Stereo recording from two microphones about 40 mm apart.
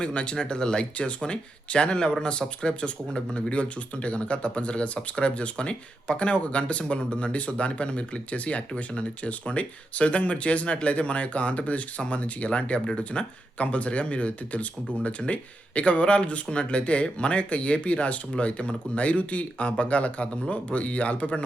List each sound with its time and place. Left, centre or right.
0.0 s speech: left